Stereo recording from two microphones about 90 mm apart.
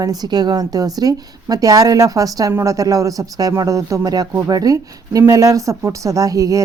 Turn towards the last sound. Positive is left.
turn(degrees=-40)  # may be behind; listen again after turning